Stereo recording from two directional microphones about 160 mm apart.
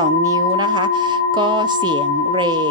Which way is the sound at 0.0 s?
25° right (ahead or behind).